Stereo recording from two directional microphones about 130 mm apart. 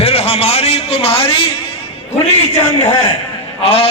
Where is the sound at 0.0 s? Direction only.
50° left (ahead or behind).